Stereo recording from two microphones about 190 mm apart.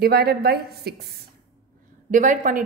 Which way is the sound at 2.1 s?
45° right (ahead or behind).